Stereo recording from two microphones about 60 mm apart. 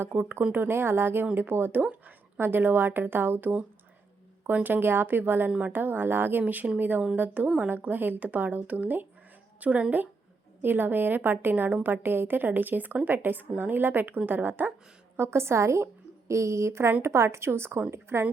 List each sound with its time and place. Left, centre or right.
0.0 s a woman's voice: right
4.5 s a woman's voice: right
5.5 s speech: right
5.7 s a woman's voice: right
15.1 s a woman's voice: right